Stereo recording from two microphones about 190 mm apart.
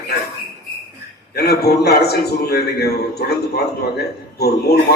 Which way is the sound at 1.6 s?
55° left (ahead or behind).